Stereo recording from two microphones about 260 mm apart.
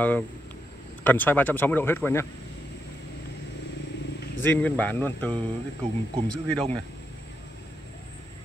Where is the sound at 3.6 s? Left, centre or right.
Left.